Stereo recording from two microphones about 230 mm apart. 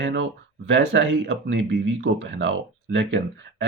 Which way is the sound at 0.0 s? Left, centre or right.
Right.